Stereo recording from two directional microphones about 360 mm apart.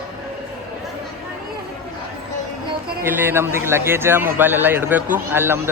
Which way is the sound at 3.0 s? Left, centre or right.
Centre.